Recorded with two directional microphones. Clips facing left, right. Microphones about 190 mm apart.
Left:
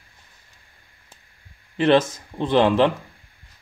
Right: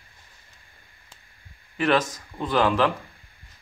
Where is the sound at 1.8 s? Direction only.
25° left (ahead or behind).